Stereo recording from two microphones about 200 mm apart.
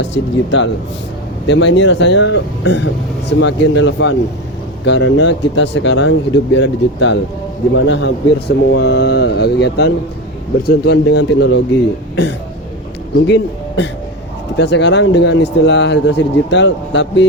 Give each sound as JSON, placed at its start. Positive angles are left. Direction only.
{"t": 0.0, "sound": "speech", "side_deg": 65}
{"t": 13.2, "sound": "a man's voice", "side_deg": 60}